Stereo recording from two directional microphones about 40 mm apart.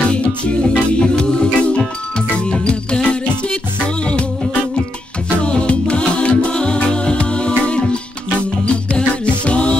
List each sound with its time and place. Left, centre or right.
0.1 s music: left
5.4 s music: left